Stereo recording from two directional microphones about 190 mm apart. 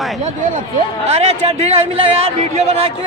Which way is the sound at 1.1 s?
35° right (ahead or behind).